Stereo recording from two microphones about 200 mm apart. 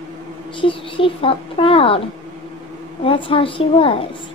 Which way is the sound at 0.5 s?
25° left (ahead or behind).